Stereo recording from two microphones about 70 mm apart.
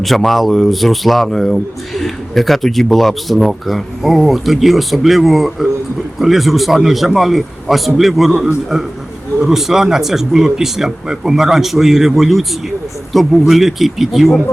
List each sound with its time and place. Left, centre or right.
0.0 s speech: centre
9.4 s speech: centre